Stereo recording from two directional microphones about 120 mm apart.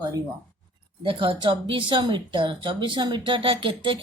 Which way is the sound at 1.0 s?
45° right (ahead or behind).